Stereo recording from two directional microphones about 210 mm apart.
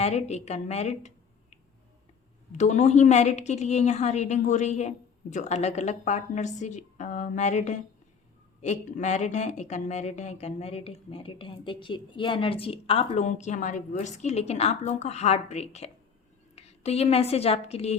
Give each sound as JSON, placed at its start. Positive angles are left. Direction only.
{"t": 0.0, "sound": "a woman's voice", "side_deg": 30}